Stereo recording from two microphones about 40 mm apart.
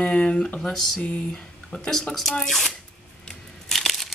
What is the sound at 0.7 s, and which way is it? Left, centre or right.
Speech, centre.